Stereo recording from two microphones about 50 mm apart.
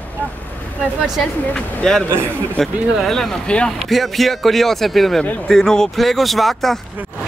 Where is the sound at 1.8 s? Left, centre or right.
Centre.